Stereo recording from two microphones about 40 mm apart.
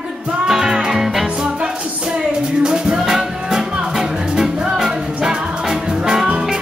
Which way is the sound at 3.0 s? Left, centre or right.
Centre.